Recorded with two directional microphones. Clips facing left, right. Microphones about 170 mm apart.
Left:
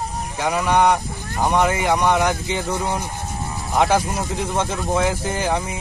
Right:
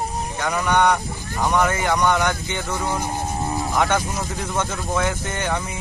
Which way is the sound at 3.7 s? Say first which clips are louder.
Left 5 dB; 30° left (ahead or behind).